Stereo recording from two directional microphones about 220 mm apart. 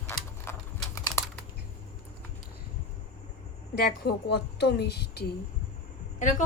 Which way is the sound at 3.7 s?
45° left (ahead or behind).